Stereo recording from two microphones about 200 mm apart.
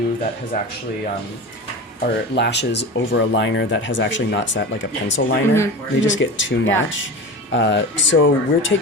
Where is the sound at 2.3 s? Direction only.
60° left (ahead or behind).